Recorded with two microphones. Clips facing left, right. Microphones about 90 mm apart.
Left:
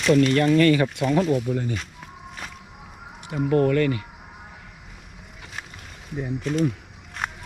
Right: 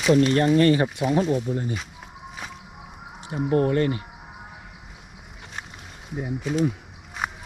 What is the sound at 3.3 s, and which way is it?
Speech, 30° right (ahead or behind).